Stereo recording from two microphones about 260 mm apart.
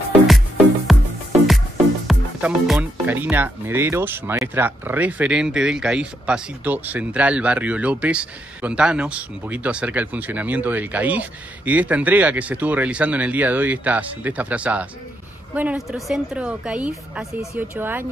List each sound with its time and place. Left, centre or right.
0.9 s music: centre
2.0 s speech: centre